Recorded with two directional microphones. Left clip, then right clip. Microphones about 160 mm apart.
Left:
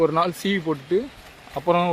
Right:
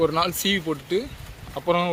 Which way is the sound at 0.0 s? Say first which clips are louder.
Left 2 dB; 45° left (ahead or behind).